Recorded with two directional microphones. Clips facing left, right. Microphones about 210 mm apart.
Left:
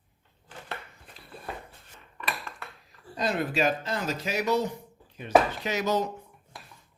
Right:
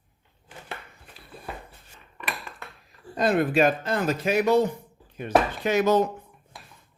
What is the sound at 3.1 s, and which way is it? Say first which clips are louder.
Speech: right 6 dB; 55° right (ahead or behind).